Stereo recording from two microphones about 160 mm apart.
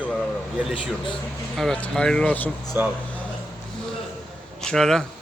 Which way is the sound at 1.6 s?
5° left (ahead or behind).